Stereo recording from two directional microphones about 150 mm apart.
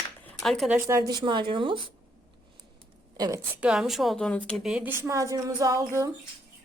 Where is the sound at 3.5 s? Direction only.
5° right (ahead or behind); by 6.1 s 20° right (ahead or behind).